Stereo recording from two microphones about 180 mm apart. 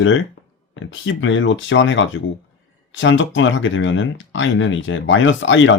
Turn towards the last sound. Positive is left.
turn(degrees=90)